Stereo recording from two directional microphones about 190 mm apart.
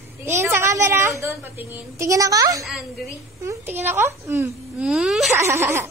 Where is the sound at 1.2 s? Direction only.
15° right (ahead or behind).